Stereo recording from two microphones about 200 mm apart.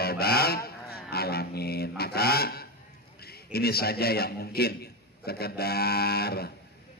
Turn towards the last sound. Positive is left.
turn(degrees=50)  # may be behind; listen again after turning